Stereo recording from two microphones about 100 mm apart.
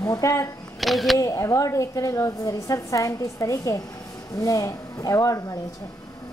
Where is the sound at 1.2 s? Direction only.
30° left (ahead or behind).